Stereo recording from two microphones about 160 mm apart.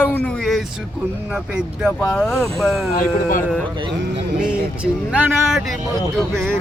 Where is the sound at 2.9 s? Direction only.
60° left (ahead or behind).